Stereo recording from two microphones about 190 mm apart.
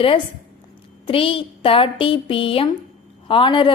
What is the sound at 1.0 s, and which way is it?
A woman's voice, 30° left (ahead or behind).